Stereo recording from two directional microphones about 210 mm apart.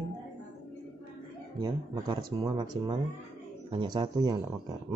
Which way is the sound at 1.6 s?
20° right (ahead or behind).